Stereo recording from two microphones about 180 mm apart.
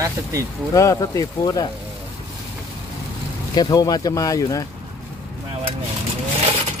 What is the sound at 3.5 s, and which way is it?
Speech, 20° left (ahead or behind).